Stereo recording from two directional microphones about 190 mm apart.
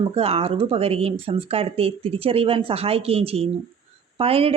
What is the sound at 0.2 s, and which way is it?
A woman's voice, 30° right (ahead or behind).